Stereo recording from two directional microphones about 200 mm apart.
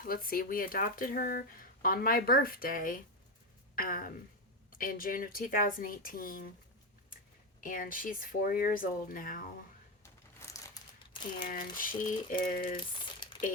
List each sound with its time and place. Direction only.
0.0 s speech: 45° left (ahead or behind)
7.6 s speech: 45° left (ahead or behind)
10.0 s a sound: 15° left (ahead or behind)
11.4 s speech: 45° left (ahead or behind)
12.7 s crumpling: 25° left (ahead or behind)